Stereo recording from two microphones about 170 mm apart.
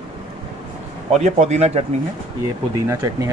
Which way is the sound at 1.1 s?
40° right (ahead or behind).